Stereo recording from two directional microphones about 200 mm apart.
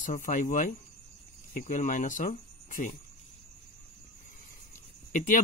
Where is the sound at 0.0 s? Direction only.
40° left (ahead or behind).